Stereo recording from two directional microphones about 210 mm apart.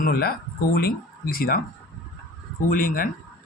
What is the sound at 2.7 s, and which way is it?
Speech, 40° left (ahead or behind).